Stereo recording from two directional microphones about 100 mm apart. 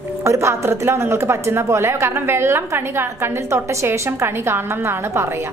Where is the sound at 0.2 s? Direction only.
30° right (ahead or behind).